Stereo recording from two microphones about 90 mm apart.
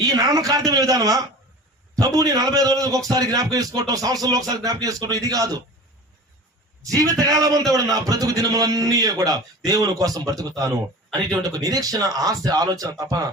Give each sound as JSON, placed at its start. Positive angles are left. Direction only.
{"t": 0.0, "sound": "a man's voice", "side_deg": -45}
{"t": 6.8, "sound": "a man's voice", "side_deg": -40}